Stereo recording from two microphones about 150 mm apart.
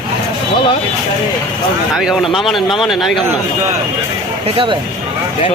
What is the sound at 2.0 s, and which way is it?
A man's voice, centre (ahead or behind).